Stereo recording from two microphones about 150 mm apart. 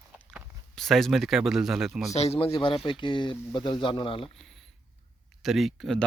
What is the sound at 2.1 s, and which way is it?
Speech, 45° left (ahead or behind).